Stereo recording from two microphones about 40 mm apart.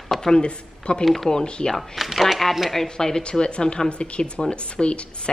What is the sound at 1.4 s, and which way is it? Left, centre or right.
Speech, left.